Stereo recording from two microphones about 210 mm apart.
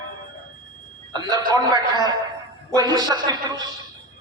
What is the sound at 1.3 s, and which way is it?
A man's voice, 20° right (ahead or behind).